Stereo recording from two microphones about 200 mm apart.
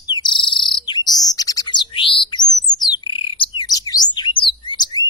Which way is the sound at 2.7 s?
20° left (ahead or behind).